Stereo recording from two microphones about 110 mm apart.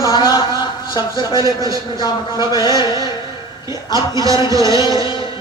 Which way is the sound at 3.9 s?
30° right (ahead or behind).